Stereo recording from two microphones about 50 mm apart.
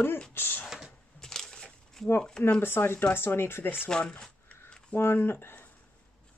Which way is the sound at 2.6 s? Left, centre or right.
Left.